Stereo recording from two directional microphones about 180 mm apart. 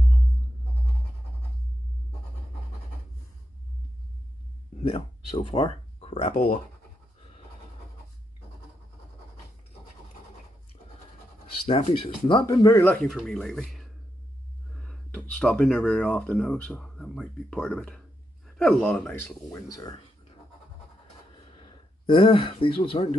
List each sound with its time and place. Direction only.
5.3 s speech: 35° left (ahead or behind)
11.6 s speech: 35° left (ahead or behind); by 20.0 s 20° left (ahead or behind)
21.3 s a sound: 25° left (ahead or behind)